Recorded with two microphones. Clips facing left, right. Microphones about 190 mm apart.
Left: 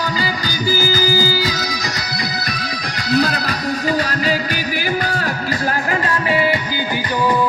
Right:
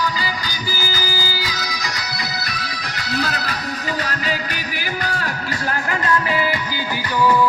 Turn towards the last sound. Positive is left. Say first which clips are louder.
# left 2 dB
turn(degrees=25)  # may be behind; listen again after turning